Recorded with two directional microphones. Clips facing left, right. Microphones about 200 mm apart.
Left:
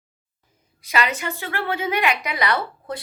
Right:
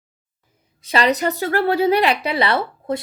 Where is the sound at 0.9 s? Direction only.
35° right (ahead or behind).